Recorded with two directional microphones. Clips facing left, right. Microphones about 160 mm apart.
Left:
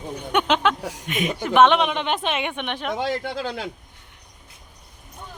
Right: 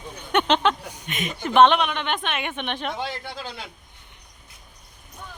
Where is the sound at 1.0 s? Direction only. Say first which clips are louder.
Left 4 dB; 5° left (ahead or behind).